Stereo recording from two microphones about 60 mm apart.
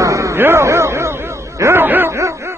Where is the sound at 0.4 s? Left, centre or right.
Right.